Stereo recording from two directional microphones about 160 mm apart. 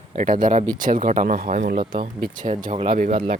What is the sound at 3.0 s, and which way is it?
Speech, 60° right (ahead or behind).